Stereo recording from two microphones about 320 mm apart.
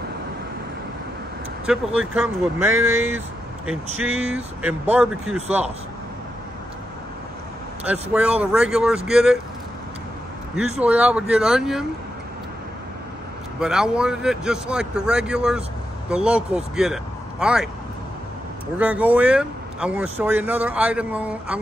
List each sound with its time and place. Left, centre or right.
1.7 s speech: centre
7.8 s speech: centre
10.8 s speech: centre
13.6 s speech: centre
18.8 s speech: centre